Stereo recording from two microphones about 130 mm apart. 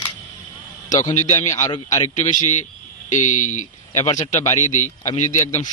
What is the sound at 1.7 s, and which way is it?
Speech, 30° left (ahead or behind).